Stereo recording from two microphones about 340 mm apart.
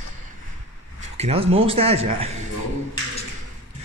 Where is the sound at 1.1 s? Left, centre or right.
Centre.